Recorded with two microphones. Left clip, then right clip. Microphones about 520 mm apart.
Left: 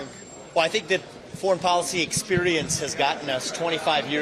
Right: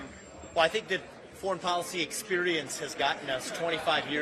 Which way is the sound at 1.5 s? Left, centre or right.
Left.